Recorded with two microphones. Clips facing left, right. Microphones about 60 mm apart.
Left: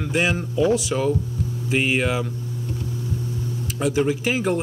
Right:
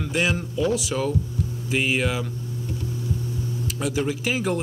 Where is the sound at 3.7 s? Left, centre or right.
Centre.